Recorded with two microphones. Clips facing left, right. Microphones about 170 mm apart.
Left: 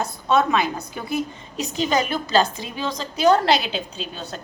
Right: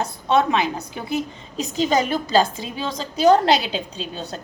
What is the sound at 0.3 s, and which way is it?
Speech, 25° right (ahead or behind).